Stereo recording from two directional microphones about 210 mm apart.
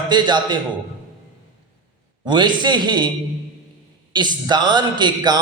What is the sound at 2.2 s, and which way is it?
Speech, 20° right (ahead or behind).